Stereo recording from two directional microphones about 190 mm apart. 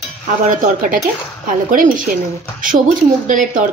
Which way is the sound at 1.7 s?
45° right (ahead or behind).